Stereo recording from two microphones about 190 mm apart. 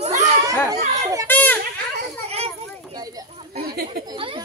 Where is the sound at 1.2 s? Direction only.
10° left (ahead or behind).